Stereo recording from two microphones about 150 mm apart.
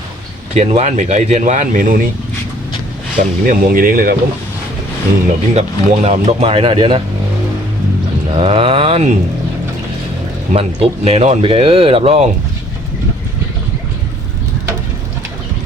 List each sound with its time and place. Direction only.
0.5 s speech: 50° right (ahead or behind); by 2.0 s 65° right (ahead or behind)
3.2 s speech: 65° right (ahead or behind)
5.5 s speech: 50° right (ahead or behind)
8.4 s speech: 35° right (ahead or behind)
10.5 s speech: 40° right (ahead or behind)